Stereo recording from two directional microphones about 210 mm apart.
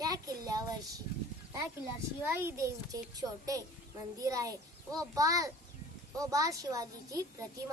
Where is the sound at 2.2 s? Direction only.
10° right (ahead or behind).